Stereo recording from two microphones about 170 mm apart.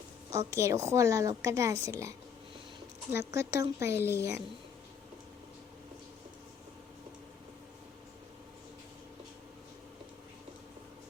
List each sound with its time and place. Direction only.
0.3 s a woman's voice: 20° right (ahead or behind)